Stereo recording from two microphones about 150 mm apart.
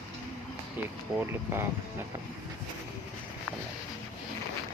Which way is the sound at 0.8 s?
10° right (ahead or behind).